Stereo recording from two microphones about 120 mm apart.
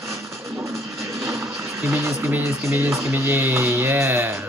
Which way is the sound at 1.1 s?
25° right (ahead or behind).